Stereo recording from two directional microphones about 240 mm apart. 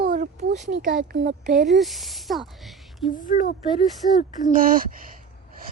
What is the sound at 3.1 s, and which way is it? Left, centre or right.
Speech, left.